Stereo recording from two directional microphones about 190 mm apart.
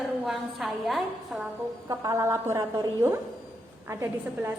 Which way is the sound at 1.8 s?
15° right (ahead or behind).